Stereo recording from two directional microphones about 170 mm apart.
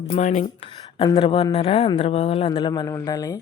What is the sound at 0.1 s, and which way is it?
Speech, 45° left (ahead or behind).